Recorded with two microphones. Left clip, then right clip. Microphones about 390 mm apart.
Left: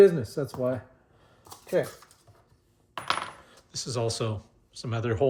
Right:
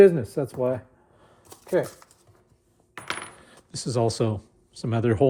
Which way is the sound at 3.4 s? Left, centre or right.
Centre.